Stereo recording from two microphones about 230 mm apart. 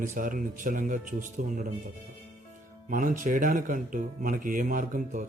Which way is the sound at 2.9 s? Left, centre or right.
Right.